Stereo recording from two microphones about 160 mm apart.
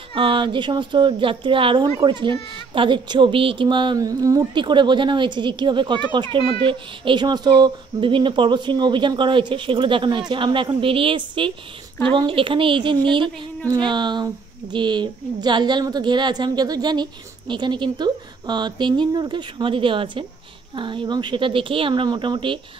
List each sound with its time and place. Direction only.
0.1 s speech: 35° right (ahead or behind)